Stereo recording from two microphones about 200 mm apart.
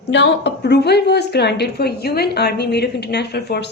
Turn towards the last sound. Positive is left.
turn(degrees=55)  # may be behind; listen again after turning